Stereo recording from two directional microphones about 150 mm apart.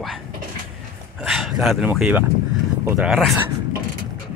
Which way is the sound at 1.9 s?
10° right (ahead or behind).